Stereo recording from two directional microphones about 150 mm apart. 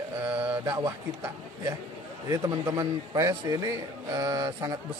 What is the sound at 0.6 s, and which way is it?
A man's voice, 25° right (ahead or behind).